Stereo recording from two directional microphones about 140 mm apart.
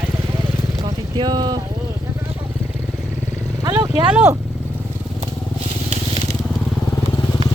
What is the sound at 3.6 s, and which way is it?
Vehicle, 25° right (ahead or behind).